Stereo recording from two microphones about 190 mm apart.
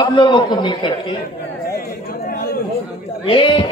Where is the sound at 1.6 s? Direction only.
50° left (ahead or behind).